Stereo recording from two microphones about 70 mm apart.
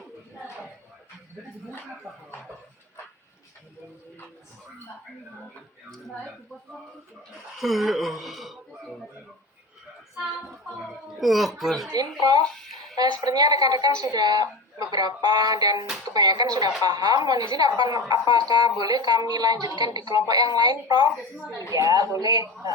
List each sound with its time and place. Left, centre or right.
7.6 s speech: centre
10.8 s speech: centre
12.2 s a woman's voice: right
12.5 s music: centre
13.0 s a woman's voice: right
21.7 s a woman's voice: right